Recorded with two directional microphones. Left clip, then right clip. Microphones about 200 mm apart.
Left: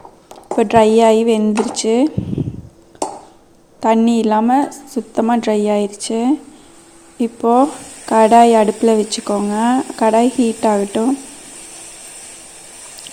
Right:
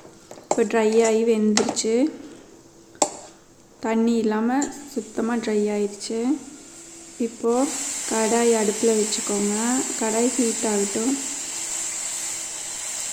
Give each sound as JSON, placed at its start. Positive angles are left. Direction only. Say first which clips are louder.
{"t": 0.5, "sound": "speech", "louder": "left 8 dB", "side_deg": 30}
{"t": 3.8, "sound": "speech", "louder": "left 9 dB", "side_deg": 35}